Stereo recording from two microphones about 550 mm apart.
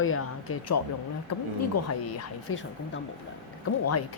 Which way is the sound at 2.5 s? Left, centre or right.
Left.